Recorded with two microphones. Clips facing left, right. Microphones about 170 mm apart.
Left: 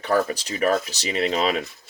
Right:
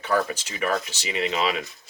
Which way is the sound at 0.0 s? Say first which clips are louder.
Left 3 dB; 40° left (ahead or behind).